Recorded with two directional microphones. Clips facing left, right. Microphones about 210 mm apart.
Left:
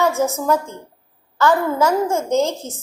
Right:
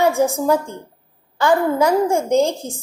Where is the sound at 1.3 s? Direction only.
15° right (ahead or behind).